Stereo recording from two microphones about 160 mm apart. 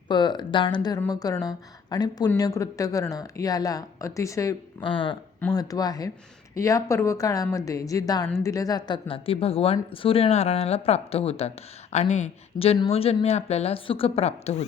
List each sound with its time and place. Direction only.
0.1 s speech: 30° left (ahead or behind)
4.9 s speech: 30° left (ahead or behind)